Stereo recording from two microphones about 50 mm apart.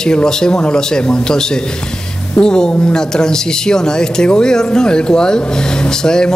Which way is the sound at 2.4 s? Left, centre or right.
Centre.